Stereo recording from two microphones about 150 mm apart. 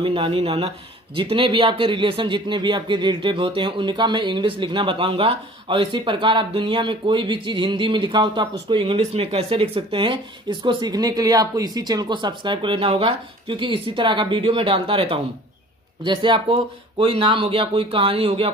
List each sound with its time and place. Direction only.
0.0 s speech: 35° right (ahead or behind)